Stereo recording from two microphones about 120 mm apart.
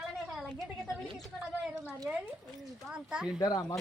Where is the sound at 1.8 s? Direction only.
25° right (ahead or behind).